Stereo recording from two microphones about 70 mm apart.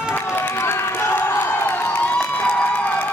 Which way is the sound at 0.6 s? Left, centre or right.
Left.